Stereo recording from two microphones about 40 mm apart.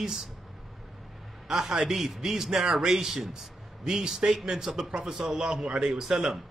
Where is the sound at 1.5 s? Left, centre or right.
Centre.